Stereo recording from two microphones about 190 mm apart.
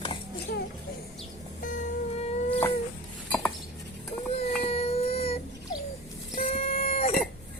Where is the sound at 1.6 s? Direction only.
40° left (ahead or behind).